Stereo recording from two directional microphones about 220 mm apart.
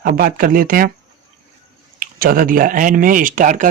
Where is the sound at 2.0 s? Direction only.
40° right (ahead or behind).